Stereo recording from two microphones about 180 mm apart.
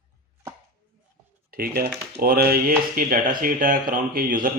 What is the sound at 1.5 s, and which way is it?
A man's voice, 55° right (ahead or behind).